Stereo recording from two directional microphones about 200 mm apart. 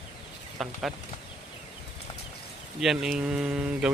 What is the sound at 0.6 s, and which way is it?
Speech, centre (ahead or behind).